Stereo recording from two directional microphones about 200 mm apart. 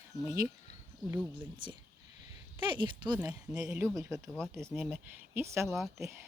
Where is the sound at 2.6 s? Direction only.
25° right (ahead or behind).